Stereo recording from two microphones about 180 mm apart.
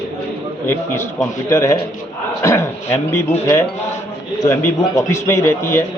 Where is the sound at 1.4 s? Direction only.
15° left (ahead or behind).